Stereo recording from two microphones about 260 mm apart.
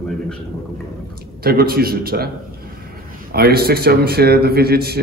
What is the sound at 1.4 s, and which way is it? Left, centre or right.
Speech, right.